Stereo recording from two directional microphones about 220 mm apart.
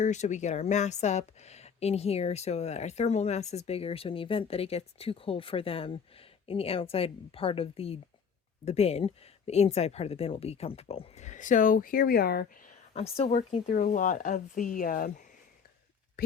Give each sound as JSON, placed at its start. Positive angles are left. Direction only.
{"t": 0.0, "sound": "a woman's voice", "side_deg": 30}
{"t": 12.9, "sound": "a woman's voice", "side_deg": 30}